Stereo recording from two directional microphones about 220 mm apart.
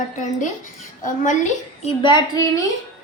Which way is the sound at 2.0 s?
20° left (ahead or behind).